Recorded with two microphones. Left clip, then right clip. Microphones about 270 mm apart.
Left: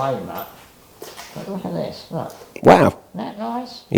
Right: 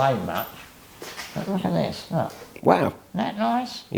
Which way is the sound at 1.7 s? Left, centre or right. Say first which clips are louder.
Even; right.